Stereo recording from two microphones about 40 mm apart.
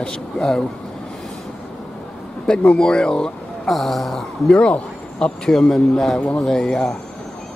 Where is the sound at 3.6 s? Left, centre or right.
Centre.